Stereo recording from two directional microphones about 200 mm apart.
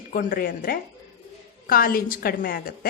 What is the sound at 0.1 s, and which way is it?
Speech, 45° left (ahead or behind).